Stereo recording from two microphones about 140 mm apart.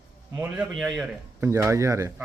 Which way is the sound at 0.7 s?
Centre (ahead or behind).